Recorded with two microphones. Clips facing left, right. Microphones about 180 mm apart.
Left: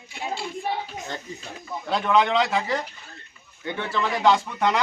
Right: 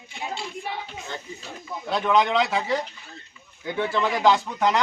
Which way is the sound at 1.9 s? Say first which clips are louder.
Even; centre (ahead or behind).